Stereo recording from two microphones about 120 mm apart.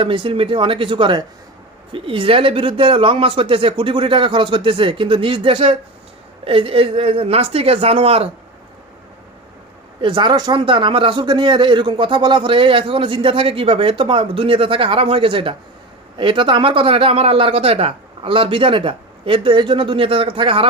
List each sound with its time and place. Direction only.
0.0 s a man's voice: 45° right (ahead or behind)
10.0 s a man's voice: 45° right (ahead or behind)